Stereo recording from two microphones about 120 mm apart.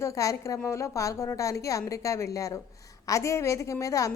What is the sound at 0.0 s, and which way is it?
A woman's voice, 25° left (ahead or behind).